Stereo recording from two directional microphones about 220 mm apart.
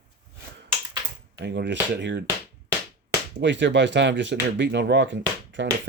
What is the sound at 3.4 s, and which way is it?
Speech, 55° right (ahead or behind).